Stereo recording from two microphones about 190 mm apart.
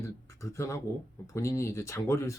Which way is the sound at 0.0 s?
15° left (ahead or behind).